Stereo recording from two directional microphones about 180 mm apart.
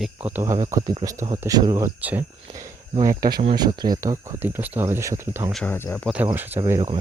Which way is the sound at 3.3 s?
30° right (ahead or behind).